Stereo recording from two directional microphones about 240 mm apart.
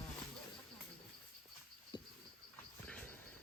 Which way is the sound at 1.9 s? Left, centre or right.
Centre.